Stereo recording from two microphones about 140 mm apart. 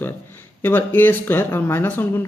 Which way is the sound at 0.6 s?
15° left (ahead or behind).